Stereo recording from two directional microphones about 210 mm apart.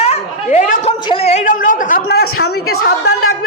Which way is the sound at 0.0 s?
30° left (ahead or behind).